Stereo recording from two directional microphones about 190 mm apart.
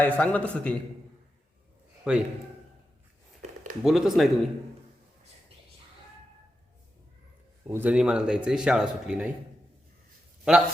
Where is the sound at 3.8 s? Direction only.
Centre (ahead or behind).